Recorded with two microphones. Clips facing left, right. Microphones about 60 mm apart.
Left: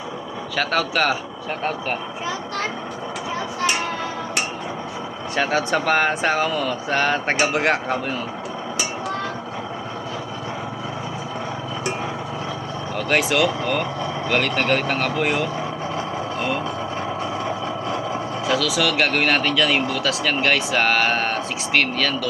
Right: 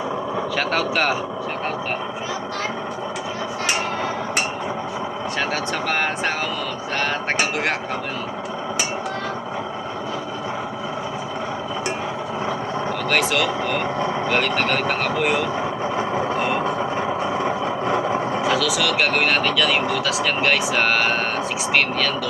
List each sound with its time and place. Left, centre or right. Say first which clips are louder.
0.5 s speech: left 2 dB; right
5.4 s speech: left 5 dB; centre
13.1 s speech: left 2 dB; centre
13.6 s speech: right 1 dB; centre
16.0 s vehicle: right 5 dB; right
18.4 s speech: left 2 dB; centre